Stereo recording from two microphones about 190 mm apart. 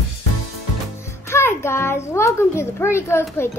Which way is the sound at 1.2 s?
15° left (ahead or behind).